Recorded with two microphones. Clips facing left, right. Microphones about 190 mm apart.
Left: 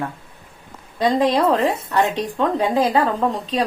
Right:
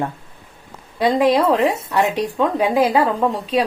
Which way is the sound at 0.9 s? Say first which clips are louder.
Right 2 dB; 10° right (ahead or behind).